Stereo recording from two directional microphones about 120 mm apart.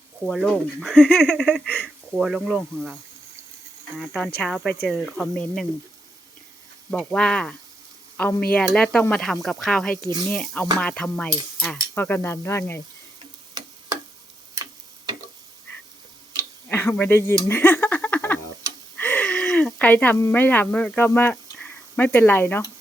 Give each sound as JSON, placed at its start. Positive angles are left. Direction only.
{"t": 0.3, "sound": "speech", "side_deg": 5}
{"t": 2.1, "sound": "speech", "side_deg": -5}
{"t": 6.9, "sound": "speech", "side_deg": 5}
{"t": 13.5, "sound": "tick-tock", "side_deg": -35}
{"t": 16.6, "sound": "speech", "side_deg": 15}
{"t": 17.5, "sound": "a sound", "side_deg": 15}